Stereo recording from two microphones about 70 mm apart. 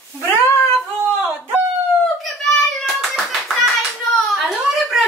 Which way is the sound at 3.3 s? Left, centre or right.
Centre.